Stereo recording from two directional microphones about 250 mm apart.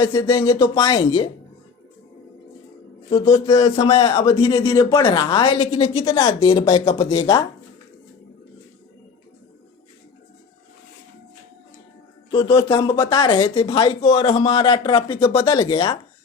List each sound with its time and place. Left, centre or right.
0.0 s speech: centre
3.1 s speech: centre
12.3 s speech: centre